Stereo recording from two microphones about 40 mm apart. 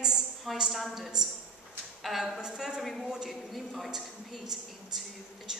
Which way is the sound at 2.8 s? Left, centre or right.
Centre.